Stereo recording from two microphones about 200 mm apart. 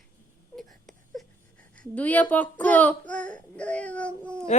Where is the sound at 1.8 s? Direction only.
10° left (ahead or behind).